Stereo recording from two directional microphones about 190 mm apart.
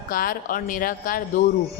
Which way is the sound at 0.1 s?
45° left (ahead or behind).